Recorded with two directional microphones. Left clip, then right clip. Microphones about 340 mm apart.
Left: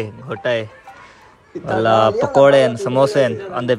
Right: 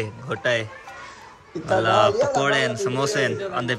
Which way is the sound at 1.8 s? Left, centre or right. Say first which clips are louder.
Left 5 dB; centre.